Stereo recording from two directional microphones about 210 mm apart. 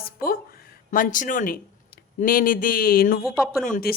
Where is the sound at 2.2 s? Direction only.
40° left (ahead or behind).